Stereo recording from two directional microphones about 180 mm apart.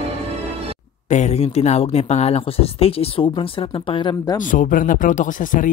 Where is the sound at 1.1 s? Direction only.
40° left (ahead or behind); by 4.4 s 25° left (ahead or behind).